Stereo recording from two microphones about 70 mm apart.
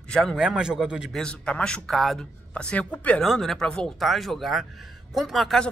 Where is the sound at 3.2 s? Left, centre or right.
Centre.